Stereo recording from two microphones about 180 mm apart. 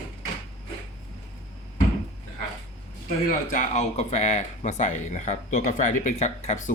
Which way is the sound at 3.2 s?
40° left (ahead or behind).